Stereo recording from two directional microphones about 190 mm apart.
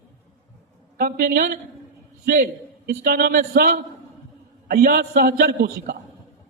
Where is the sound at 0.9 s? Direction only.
50° right (ahead or behind).